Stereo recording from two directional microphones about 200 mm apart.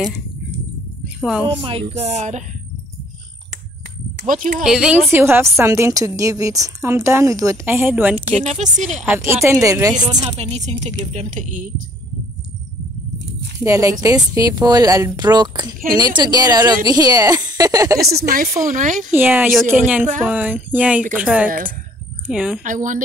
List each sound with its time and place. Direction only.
1.0 s a sound: 5° right (ahead or behind)
1.6 s speech: 30° right (ahead or behind)
4.3 s speech: 40° right (ahead or behind)
4.6 s a woman's voice: 5° right (ahead or behind)
8.3 s speech: 35° right (ahead or behind)
9.3 s a woman's voice: 15° right (ahead or behind)
10.2 s speech: 30° right (ahead or behind)
13.7 s a woman's voice: 15° right (ahead or behind)
18.6 s speech: 40° right (ahead or behind)
19.1 s a woman's voice: 10° right (ahead or behind)
21.5 s speech: 45° right (ahead or behind)
22.2 s speech: 5° right (ahead or behind)
22.6 s speech: 40° right (ahead or behind)